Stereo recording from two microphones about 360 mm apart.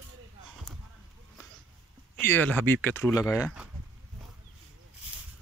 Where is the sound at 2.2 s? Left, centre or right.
Centre.